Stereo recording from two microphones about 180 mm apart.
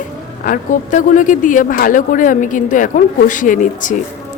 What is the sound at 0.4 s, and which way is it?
Speech, 50° left (ahead or behind).